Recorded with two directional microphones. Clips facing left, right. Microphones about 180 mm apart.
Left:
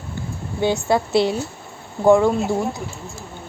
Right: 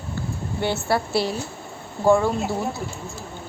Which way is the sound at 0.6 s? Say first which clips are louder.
Left 4 dB; 15° left (ahead or behind).